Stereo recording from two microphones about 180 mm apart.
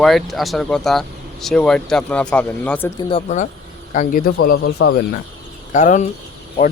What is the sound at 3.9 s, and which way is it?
Speech, 50° left (ahead or behind).